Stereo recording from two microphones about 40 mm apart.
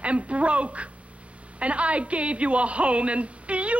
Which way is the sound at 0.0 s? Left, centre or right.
Right.